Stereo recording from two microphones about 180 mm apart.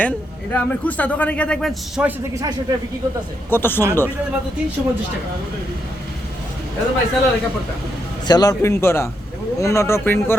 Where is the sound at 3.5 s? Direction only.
10° left (ahead or behind).